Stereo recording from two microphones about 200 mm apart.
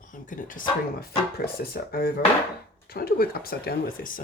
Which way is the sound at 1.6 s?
50° left (ahead or behind).